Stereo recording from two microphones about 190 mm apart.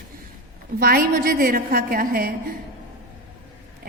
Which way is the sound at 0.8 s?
50° right (ahead or behind).